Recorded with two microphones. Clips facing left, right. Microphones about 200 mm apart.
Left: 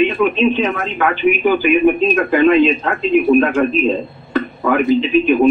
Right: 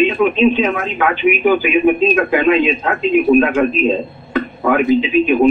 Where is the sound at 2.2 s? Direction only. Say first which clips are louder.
Left 2 dB; 10° right (ahead or behind).